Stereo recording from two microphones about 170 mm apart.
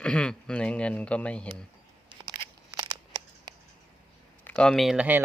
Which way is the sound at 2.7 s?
25° right (ahead or behind).